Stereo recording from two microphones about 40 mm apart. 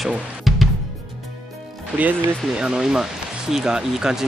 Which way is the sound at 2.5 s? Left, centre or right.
Centre.